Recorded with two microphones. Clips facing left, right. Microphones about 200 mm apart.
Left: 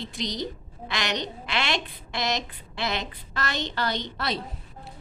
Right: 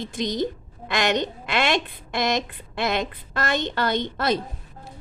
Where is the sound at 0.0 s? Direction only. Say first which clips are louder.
Right 6 dB; 50° right (ahead or behind).